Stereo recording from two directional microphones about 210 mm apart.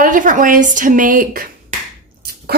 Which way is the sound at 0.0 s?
40° right (ahead or behind).